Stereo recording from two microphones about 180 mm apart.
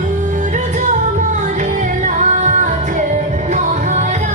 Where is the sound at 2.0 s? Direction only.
45° right (ahead or behind).